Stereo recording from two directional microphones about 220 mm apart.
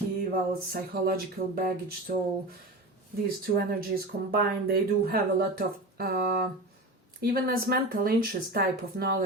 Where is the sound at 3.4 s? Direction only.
45° right (ahead or behind).